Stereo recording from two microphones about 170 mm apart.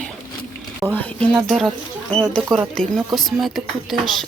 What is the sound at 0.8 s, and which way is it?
Speech, 10° right (ahead or behind).